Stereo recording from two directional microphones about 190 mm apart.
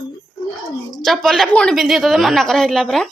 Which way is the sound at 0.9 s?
Centre (ahead or behind).